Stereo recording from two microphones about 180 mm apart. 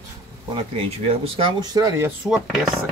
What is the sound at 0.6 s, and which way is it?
Speech, 30° right (ahead or behind).